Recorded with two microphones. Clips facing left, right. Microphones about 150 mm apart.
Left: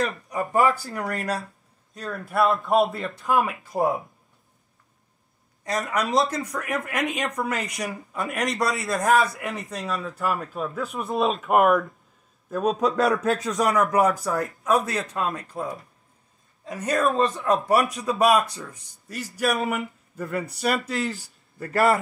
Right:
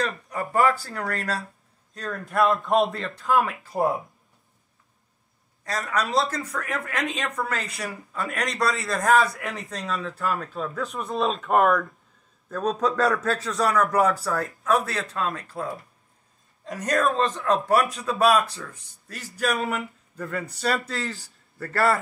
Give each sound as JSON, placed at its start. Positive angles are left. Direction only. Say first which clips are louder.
{"t": 0.0, "sound": "a man's voice", "louder": "left 2 dB", "side_deg": 15}
{"t": 3.0, "sound": "speech", "louder": "even", "side_deg": 15}
{"t": 5.6, "sound": "speech", "louder": "left 2 dB", "side_deg": 20}
{"t": 16.8, "sound": "speech", "louder": "left 1 dB", "side_deg": 10}